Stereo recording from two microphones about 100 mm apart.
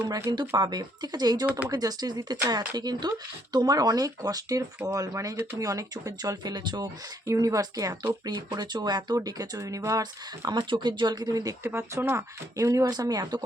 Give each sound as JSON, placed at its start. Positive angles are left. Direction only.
{"t": 0.3, "sound": "speech", "side_deg": -45}
{"t": 1.5, "sound": "speech", "side_deg": -15}
{"t": 1.7, "sound": "speech", "side_deg": -40}
{"t": 7.3, "sound": "speech", "side_deg": -35}